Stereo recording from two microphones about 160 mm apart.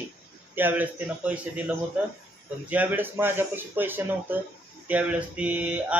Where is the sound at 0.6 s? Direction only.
10° right (ahead or behind).